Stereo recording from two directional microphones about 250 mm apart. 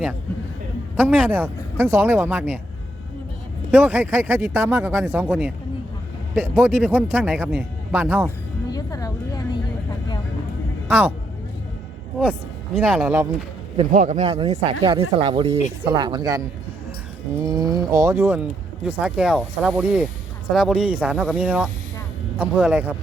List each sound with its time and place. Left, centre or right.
0.9 s speech: centre
1.8 s speech: centre
3.7 s speech: centre
6.7 s speech: centre
8.7 s speech: centre
10.8 s speech: centre
12.3 s speech: centre
13.7 s speech: right
17.4 s speech: centre